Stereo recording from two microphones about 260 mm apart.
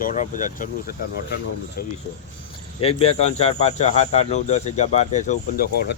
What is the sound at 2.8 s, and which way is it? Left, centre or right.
Speech, left.